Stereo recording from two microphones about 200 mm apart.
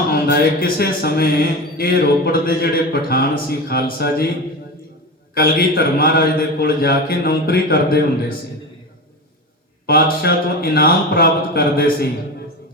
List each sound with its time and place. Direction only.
0.1 s speech: 50° left (ahead or behind)
5.3 s speech: 50° left (ahead or behind)
9.8 s speech: 50° left (ahead or behind)